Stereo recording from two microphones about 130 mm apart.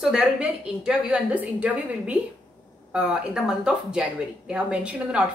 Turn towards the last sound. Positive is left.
turn(degrees=-5)  # may be behind; listen again after turning